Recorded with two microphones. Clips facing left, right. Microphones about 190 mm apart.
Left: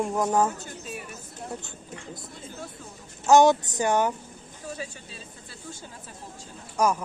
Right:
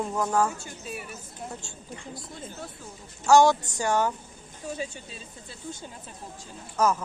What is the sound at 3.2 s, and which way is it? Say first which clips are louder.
Speech: left 1 dB; 20° left (ahead or behind).